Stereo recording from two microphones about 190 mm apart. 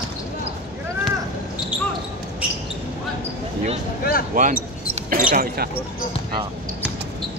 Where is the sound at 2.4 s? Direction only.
5° right (ahead or behind).